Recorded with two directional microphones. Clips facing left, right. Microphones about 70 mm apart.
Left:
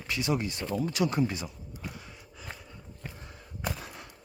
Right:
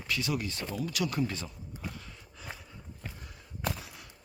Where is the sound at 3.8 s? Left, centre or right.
Left.